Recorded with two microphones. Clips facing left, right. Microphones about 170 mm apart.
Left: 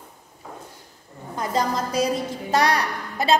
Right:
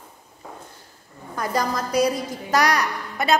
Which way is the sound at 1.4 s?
25° left (ahead or behind).